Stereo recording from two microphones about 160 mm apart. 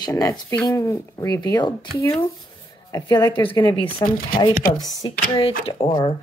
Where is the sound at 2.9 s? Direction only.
20° left (ahead or behind).